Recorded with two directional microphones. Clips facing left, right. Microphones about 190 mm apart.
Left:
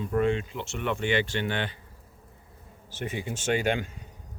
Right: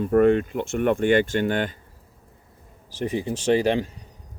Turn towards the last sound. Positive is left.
turn(degrees=-35)  # may be behind; listen again after turning